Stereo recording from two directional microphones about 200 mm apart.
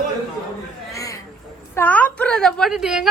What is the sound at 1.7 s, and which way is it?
A woman's voice, 10° left (ahead or behind).